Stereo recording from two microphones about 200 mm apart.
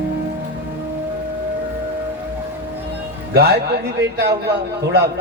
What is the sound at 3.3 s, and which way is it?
Speech, 55° right (ahead or behind).